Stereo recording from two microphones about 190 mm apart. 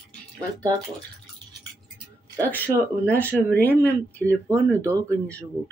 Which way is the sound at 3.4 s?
10° left (ahead or behind).